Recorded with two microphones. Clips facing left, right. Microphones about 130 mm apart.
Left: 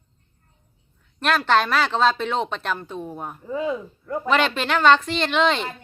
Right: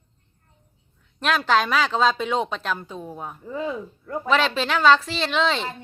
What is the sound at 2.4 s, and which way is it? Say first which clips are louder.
Speech: left 1 dB; 5° left (ahead or behind).